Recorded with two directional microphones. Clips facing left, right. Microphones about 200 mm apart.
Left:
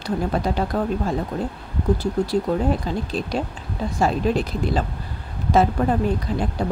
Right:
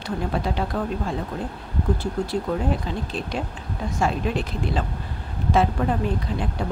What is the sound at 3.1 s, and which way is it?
Speech, 35° left (ahead or behind).